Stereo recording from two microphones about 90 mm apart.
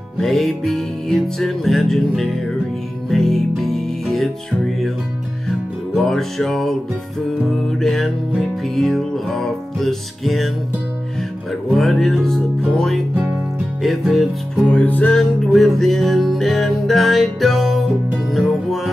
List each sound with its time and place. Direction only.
0.2 s music: 5° left (ahead or behind)
5.9 s music: 5° left (ahead or behind)
7.8 s music: centre (ahead or behind)
11.7 s music: centre (ahead or behind)
14.7 s music: 15° left (ahead or behind)
15.1 s music: centre (ahead or behind)